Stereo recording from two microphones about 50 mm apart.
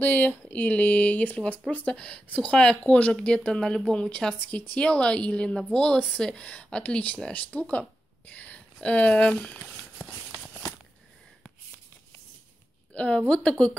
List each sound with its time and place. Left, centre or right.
0.0 s speech: left; by 4.4 s centre
4.4 s speech: left
8.3 s a sound: left
8.8 s speech: left
12.9 s a woman's voice: left